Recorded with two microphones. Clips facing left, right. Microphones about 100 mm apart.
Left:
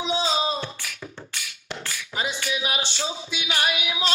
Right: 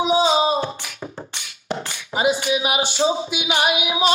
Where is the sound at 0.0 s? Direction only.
15° right (ahead or behind).